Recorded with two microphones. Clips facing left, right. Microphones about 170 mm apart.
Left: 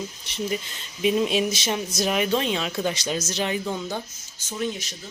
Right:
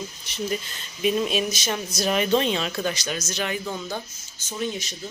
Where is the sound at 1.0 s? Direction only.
20° left (ahead or behind).